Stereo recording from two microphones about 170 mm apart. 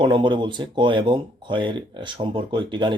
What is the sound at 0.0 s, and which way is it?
Speech, 25° right (ahead or behind).